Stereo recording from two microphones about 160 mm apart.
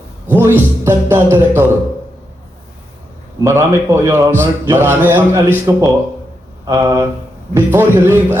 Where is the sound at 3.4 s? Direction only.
15° right (ahead or behind).